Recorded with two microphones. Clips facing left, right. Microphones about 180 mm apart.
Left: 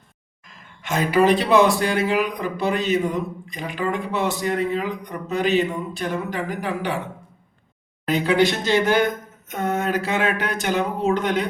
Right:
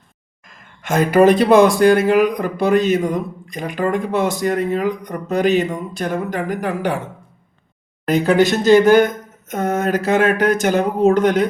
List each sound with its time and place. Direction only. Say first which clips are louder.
0.4 s speech: right 6 dB; 45° right (ahead or behind)
8.0 s speech: right 4 dB; 45° right (ahead or behind)